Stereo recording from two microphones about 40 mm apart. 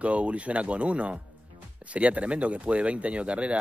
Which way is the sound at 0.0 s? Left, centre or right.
Right.